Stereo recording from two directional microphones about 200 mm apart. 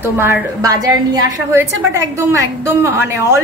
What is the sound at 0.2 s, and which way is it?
A woman's voice, 15° right (ahead or behind).